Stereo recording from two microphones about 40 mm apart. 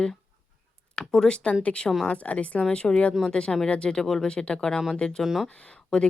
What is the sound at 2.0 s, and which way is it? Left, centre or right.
Speech, left.